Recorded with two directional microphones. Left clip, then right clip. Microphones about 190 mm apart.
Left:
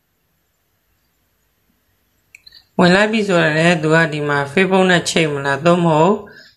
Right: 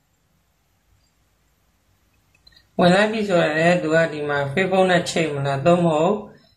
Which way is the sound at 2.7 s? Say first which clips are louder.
Left 3 dB; 25° left (ahead or behind).